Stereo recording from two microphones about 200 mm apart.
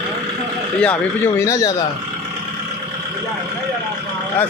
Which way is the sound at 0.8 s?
10° left (ahead or behind).